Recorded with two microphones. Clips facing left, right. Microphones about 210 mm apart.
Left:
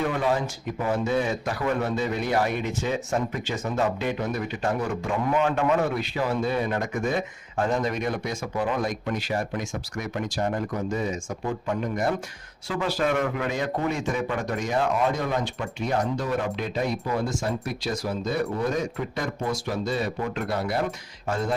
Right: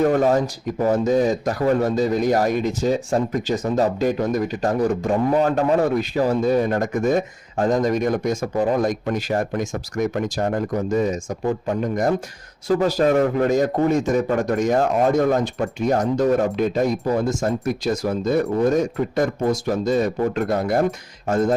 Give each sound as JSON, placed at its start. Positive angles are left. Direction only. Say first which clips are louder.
{"t": 0.0, "sound": "speech", "louder": "right 8 dB", "side_deg": -45}